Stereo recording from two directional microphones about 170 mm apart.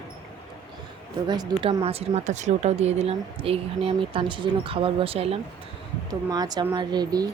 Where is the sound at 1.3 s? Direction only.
25° right (ahead or behind).